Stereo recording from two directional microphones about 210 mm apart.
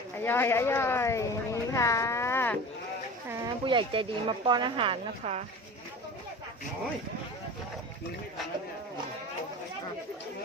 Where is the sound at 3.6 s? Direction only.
25° right (ahead or behind).